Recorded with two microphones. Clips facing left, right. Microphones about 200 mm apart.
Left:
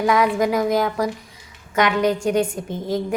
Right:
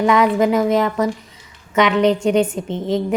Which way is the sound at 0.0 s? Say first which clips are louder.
Right 3 dB; 10° left (ahead or behind).